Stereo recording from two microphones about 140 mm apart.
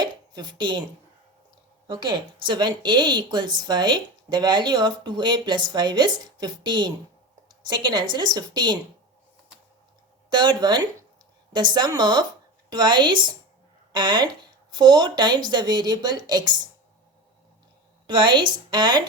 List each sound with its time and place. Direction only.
0.0 s a sound: 30° right (ahead or behind)
1.9 s speech: 35° right (ahead or behind)
7.4 s a sound: 30° right (ahead or behind)
8.1 s a woman's voice: 30° right (ahead or behind)
10.2 s a woman's voice: 35° right (ahead or behind)
18.0 s speech: 35° right (ahead or behind)